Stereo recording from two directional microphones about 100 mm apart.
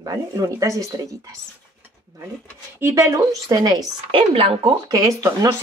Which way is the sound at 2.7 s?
25° right (ahead or behind).